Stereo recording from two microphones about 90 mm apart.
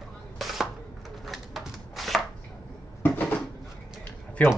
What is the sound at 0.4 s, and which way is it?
Chopping, centre (ahead or behind).